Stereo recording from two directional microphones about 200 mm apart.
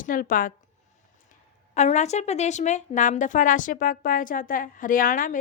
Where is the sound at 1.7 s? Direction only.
35° left (ahead or behind).